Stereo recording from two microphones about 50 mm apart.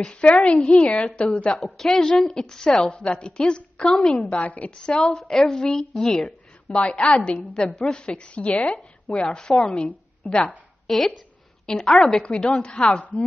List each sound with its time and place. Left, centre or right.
0.0 s a woman's voice: left
1.5 s a woman's voice: centre
2.8 s a woman's voice: left
4.2 s a woman's voice: left
4.6 s a woman's voice: centre
6.7 s a woman's voice: left
7.7 s a woman's voice: centre
8.0 s a woman's voice: left
10.9 s a woman's voice: centre